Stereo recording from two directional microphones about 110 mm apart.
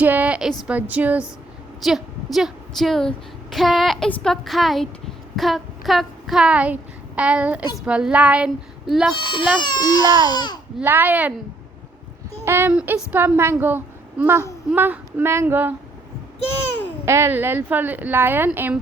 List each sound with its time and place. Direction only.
0.0 s a sound: 15° right (ahead or behind)
0.7 s a woman's voice: 15° right (ahead or behind)
1.8 s a woman's voice: 5° right (ahead or behind)
5.4 s child singing: centre (ahead or behind)
7.2 s a woman's voice: 10° right (ahead or behind)
9.6 s speech: 40° left (ahead or behind)
10.8 s a woman's voice: 15° right (ahead or behind)
12.5 s a woman's voice: 20° right (ahead or behind)
17.1 s a woman's voice: 20° right (ahead or behind)